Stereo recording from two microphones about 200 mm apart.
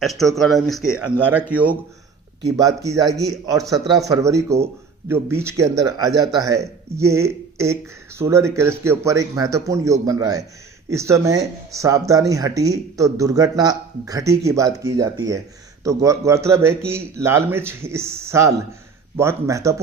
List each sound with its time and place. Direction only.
0.0 s speech: centre (ahead or behind); by 19.7 s 15° right (ahead or behind)